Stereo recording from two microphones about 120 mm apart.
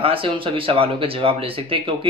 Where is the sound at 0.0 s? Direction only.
50° right (ahead or behind).